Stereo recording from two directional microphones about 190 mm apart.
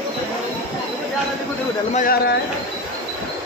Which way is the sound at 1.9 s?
50° left (ahead or behind).